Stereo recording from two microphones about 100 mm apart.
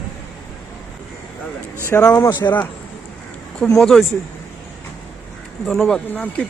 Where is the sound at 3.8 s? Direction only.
Centre (ahead or behind).